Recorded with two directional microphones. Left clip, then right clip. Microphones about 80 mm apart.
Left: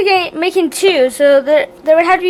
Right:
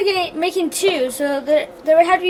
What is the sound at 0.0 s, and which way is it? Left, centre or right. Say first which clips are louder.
A woman's voice: left 6 dB; left.